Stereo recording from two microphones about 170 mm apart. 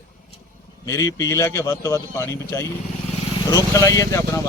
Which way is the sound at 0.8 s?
20° left (ahead or behind).